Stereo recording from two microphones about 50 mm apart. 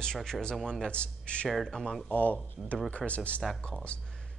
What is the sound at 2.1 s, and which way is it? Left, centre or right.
Speech, left.